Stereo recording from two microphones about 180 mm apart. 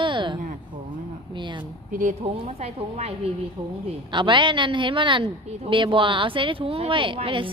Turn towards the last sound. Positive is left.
turn(degrees=-30)  # may be behind; listen again after turning